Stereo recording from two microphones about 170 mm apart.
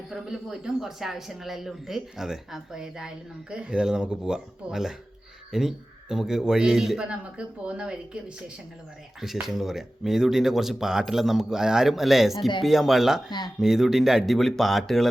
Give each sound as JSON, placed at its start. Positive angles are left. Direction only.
{"t": 0.1, "sound": "speech", "side_deg": 0}
{"t": 9.2, "sound": "speech", "side_deg": 0}